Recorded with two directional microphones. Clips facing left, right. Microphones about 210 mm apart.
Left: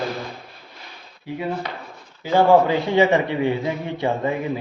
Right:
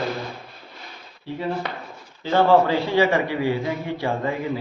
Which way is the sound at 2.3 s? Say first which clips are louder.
Left 2 dB; 20° left (ahead or behind).